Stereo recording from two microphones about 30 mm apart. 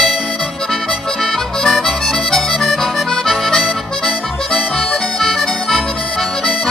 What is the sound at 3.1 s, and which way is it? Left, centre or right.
Music, centre.